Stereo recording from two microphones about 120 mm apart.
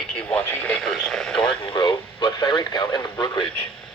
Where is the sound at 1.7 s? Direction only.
45° left (ahead or behind).